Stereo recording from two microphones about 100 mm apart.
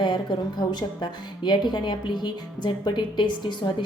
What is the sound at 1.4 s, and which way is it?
Speech, 50° left (ahead or behind).